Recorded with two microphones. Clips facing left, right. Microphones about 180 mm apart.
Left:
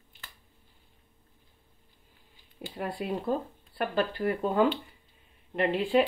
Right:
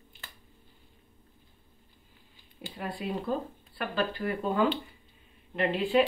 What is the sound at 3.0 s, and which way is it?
Speech, 50° left (ahead or behind).